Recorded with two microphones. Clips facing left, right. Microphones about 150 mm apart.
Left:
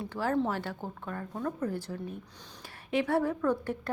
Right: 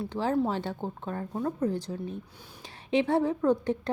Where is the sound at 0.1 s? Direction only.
15° right (ahead or behind).